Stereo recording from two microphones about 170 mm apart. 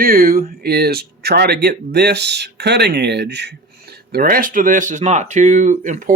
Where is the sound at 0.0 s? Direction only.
60° right (ahead or behind).